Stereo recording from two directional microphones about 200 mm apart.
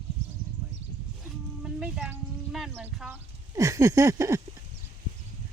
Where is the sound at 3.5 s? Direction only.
15° right (ahead or behind).